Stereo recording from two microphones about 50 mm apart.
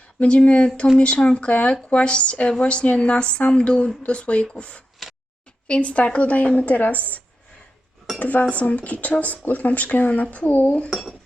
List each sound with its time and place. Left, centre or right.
0.2 s speech: left
5.0 s a sound: centre
5.6 s speech: left
8.2 s speech: left
10.8 s speech: centre